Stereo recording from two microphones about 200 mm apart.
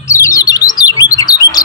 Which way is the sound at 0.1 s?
15° left (ahead or behind).